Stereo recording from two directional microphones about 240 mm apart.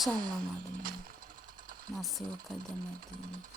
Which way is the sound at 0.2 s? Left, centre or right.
Right.